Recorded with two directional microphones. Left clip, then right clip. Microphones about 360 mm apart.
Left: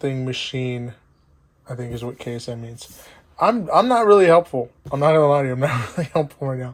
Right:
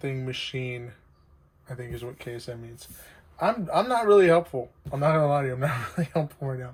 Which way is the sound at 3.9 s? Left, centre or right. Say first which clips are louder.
Left 5 dB; centre.